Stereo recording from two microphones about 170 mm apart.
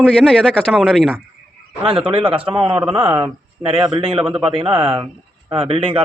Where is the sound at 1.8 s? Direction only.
30° right (ahead or behind).